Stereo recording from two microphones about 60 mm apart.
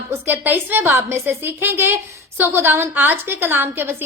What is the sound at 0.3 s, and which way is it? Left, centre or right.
Speech, right.